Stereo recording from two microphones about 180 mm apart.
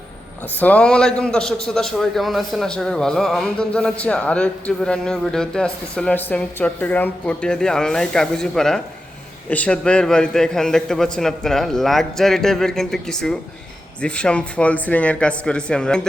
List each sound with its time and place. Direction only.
0.6 s a man's voice: 5° left (ahead or behind)